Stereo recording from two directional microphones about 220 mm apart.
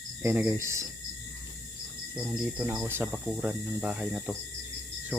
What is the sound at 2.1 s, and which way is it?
Speech, 5° right (ahead or behind).